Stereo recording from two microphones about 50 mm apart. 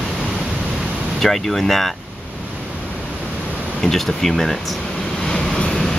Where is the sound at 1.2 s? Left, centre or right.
Centre.